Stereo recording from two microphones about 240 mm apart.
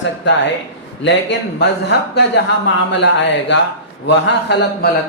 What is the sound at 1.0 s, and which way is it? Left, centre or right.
A man's voice, left.